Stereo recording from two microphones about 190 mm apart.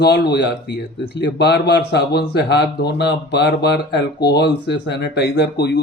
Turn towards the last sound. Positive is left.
turn(degrees=60)  # may be behind; listen again after turning